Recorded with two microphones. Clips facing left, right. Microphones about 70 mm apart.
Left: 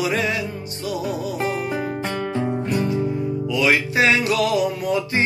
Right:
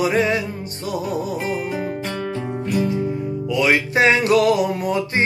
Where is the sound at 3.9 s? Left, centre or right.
Right.